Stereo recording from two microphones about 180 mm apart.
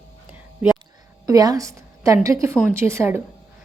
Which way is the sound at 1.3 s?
20° right (ahead or behind).